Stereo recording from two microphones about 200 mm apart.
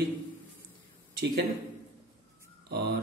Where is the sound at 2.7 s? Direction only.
60° right (ahead or behind).